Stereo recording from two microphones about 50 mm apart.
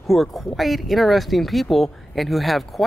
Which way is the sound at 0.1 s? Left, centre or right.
Centre.